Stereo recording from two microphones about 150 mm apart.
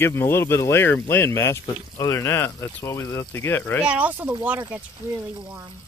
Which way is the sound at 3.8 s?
10° right (ahead or behind).